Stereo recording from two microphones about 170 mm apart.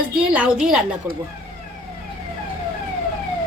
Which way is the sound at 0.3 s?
5° right (ahead or behind).